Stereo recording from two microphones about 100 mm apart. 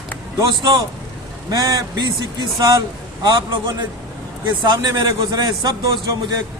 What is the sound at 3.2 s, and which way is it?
A man's voice, 45° right (ahead or behind).